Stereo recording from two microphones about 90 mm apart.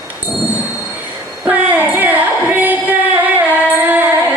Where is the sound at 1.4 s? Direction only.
20° right (ahead or behind).